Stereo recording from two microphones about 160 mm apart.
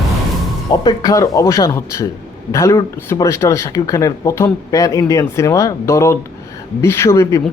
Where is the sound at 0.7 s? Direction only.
25° left (ahead or behind).